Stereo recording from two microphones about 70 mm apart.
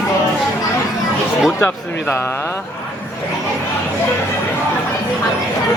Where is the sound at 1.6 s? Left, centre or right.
Left.